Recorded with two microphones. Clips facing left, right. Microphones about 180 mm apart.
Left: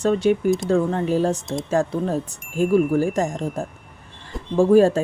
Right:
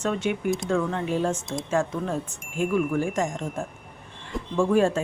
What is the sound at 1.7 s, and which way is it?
Speech, 35° left (ahead or behind).